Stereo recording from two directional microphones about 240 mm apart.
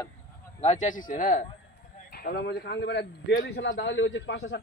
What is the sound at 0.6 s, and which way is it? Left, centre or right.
A man's voice, left.